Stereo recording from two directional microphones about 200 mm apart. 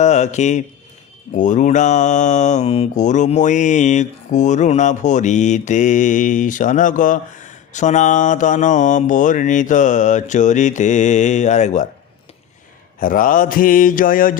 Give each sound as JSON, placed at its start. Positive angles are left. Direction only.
{"t": 0.0, "sound": "speech", "side_deg": 35}
{"t": 1.3, "sound": "mantra", "side_deg": 40}
{"t": 13.0, "sound": "speech", "side_deg": 40}